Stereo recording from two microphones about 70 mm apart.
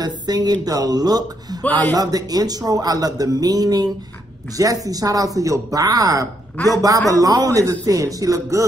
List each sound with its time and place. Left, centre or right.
0.0 s speech: right